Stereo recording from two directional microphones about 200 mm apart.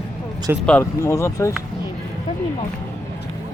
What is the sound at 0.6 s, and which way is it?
Speech, 10° left (ahead or behind).